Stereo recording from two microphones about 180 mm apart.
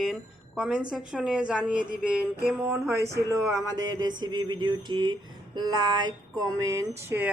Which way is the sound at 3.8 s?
20° right (ahead or behind).